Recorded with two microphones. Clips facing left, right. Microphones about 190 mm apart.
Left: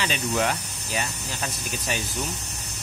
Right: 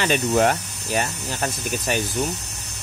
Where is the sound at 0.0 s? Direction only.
50° right (ahead or behind).